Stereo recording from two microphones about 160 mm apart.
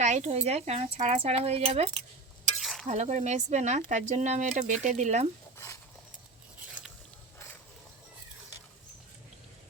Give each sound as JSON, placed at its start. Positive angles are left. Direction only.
{"t": 0.0, "sound": "speech", "side_deg": -45}
{"t": 2.4, "sound": "stir", "side_deg": 0}
{"t": 2.8, "sound": "speech", "side_deg": -45}
{"t": 6.7, "sound": "biting", "side_deg": -5}